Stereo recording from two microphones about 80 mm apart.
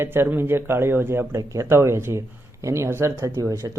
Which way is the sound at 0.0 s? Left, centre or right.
Right.